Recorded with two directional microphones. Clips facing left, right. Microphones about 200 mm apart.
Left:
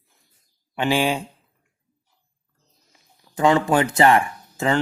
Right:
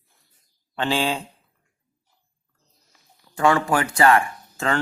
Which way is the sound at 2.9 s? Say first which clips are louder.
Even; 20° left (ahead or behind).